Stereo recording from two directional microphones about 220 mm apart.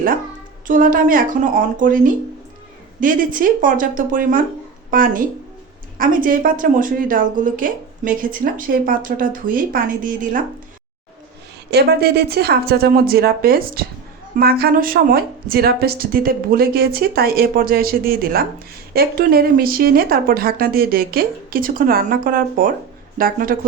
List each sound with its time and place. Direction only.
0.7 s speech: 40° right (ahead or behind)
3.0 s speech: 40° right (ahead or behind)
11.7 s a woman's voice: 45° right (ahead or behind)